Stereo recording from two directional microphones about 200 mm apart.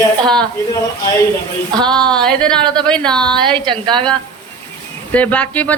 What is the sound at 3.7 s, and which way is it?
Speech, 25° right (ahead or behind).